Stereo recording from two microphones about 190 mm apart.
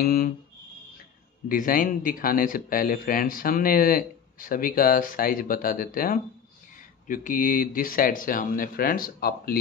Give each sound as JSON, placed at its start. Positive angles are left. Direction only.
{"t": 0.0, "sound": "speech", "side_deg": 50}
{"t": 1.5, "sound": "speech", "side_deg": 45}